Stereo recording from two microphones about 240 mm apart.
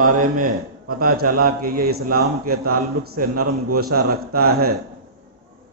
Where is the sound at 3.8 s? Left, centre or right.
Right.